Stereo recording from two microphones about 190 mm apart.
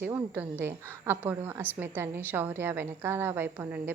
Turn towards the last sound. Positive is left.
turn(degrees=-10)  # may be behind; listen again after turning